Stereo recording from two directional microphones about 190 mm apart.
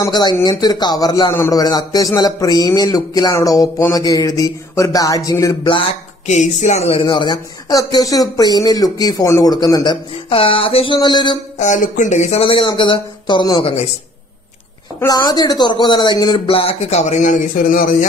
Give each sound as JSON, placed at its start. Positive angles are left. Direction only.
{"t": 0.0, "sound": "speech", "side_deg": 20}
{"t": 11.5, "sound": "speech", "side_deg": 40}
{"t": 15.0, "sound": "speech", "side_deg": 20}